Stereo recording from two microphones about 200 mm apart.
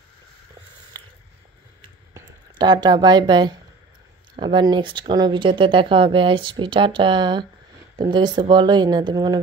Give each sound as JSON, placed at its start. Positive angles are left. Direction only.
{"t": 2.1, "sound": "speech", "side_deg": -20}